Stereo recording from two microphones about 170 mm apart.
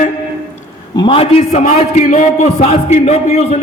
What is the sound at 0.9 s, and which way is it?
A man's voice, 30° left (ahead or behind).